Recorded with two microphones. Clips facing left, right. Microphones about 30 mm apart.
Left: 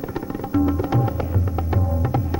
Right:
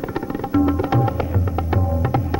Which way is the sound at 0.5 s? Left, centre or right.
Right.